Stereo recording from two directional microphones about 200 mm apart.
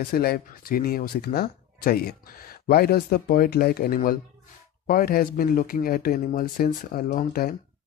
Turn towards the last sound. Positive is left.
turn(degrees=45)  # may be behind; listen again after turning